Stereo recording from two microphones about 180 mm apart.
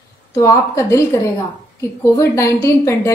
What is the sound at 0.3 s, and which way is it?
A woman's voice, 20° left (ahead or behind).